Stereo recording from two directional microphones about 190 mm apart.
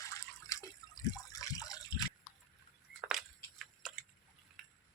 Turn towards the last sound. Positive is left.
turn(degrees=0)  # may be behind; listen again after turning